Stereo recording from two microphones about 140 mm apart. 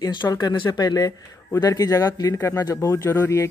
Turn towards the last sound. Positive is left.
turn(degrees=20)  # may be behind; listen again after turning